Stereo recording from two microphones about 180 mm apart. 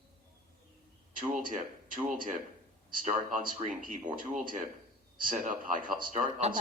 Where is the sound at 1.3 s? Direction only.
50° right (ahead or behind).